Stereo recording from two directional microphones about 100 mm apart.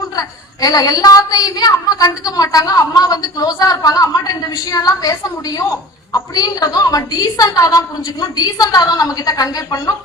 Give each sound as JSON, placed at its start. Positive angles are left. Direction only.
{"t": 0.2, "sound": "a woman's voice", "side_deg": 40}
{"t": 6.3, "sound": "a woman's voice", "side_deg": 40}